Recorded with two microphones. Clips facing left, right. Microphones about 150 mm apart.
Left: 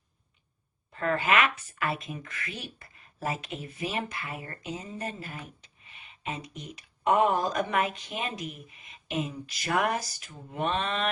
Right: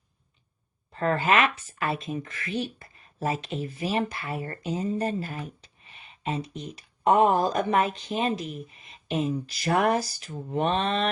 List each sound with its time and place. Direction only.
0.9 s speech: 30° right (ahead or behind)